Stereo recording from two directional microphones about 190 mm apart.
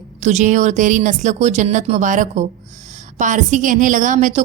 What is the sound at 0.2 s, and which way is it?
A woman's voice, 40° right (ahead or behind).